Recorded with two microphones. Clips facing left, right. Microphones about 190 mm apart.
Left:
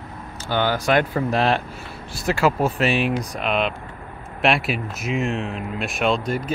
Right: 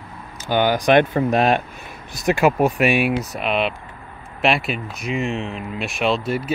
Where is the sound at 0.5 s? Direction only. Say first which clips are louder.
Right 4 dB; 15° right (ahead or behind).